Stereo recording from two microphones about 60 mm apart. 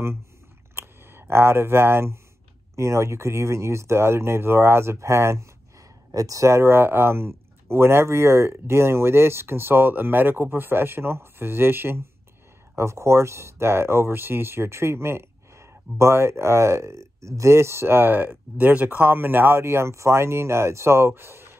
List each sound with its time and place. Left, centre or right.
0.7 s speech: right
2.7 s speech: right
6.1 s speech: right
6.5 s speech: right
12.7 s speech: right